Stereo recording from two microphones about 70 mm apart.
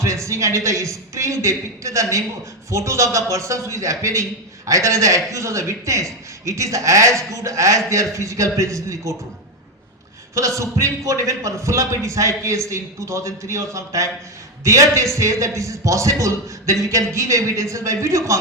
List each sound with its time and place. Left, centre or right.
0.0 s a man's voice: right
10.3 s a man's voice: right